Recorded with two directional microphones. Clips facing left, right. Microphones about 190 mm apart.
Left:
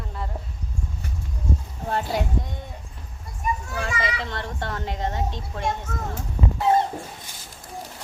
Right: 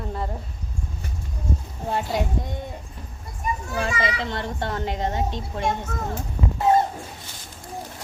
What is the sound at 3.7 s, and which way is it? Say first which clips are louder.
A child's voice: right 3 dB; 25° right (ahead or behind).